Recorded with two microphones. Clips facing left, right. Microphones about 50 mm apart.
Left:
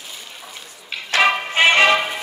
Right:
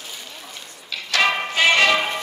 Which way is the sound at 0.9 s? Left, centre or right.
Left.